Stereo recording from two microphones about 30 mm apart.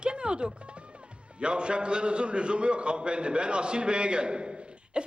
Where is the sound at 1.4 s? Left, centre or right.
Right.